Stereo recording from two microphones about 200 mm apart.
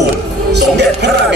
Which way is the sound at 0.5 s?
55° right (ahead or behind).